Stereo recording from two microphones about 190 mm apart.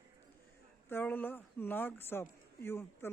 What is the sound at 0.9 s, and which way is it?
Speech, 10° left (ahead or behind).